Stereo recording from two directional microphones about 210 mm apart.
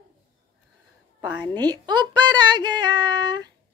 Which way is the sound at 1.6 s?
20° right (ahead or behind).